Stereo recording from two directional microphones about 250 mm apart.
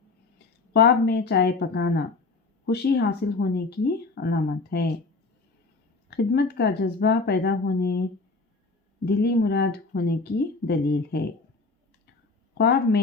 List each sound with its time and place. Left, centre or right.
0.7 s speech: left
6.1 s speech: left
9.0 s speech: left
12.5 s speech: left